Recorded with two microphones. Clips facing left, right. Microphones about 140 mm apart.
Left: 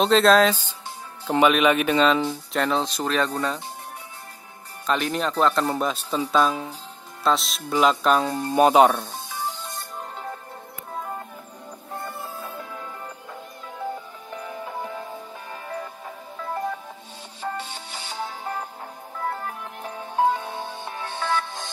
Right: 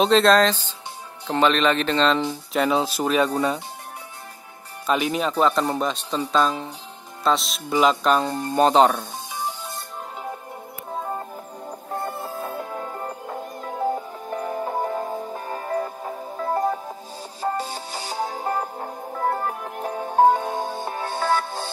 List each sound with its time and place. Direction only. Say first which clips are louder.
0.0 s speech: even; centre (ahead or behind)
2.6 s speech: right 3 dB; 5° right (ahead or behind)
4.8 s speech: right 2 dB; 5° right (ahead or behind); by 9.0 s 10° left (ahead or behind)
11.0 s music: right 3 dB; 30° right (ahead or behind)
12.0 s music: right 4 dB; 45° right (ahead or behind)